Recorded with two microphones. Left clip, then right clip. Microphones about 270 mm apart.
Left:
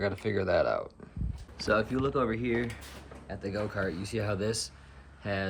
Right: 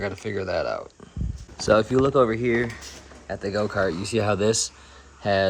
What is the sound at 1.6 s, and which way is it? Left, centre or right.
Speech, right.